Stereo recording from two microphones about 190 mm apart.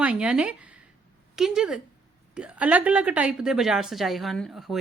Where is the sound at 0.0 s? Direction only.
5° right (ahead or behind).